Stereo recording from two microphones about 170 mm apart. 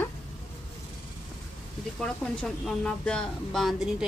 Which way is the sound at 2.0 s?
5° left (ahead or behind).